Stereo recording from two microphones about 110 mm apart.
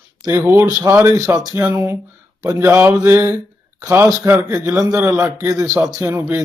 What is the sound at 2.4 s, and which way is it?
Speech, 35° right (ahead or behind).